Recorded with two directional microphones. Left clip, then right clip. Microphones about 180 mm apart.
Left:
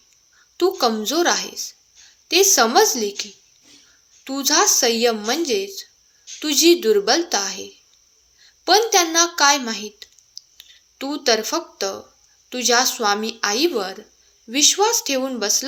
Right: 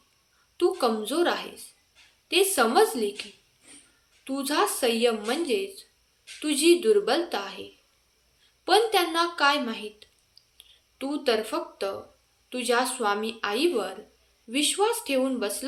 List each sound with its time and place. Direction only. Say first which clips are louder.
0.5 s a woman's voice: left 5 dB; 35° left (ahead or behind)